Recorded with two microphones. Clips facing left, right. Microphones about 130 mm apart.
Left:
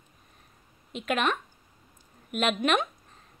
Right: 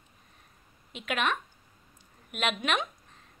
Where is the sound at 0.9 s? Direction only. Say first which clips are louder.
Left 3 dB; 40° left (ahead or behind).